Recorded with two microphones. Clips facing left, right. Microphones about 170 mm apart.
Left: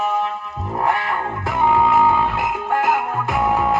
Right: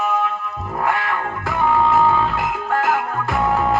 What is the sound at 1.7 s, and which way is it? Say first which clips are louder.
Music: even; 10° left (ahead or behind).